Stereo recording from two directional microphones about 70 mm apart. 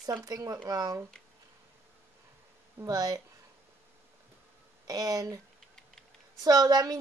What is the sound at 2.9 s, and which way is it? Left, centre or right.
Speech, right.